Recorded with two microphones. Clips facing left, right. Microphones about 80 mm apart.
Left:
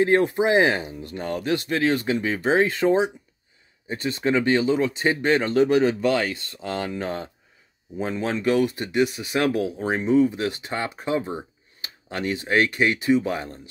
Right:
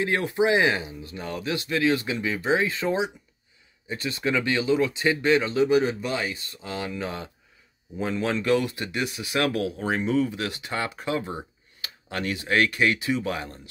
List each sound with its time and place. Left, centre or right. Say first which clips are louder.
0.0 s speech: left 4 dB; left
8.0 s speech: left 1 dB; left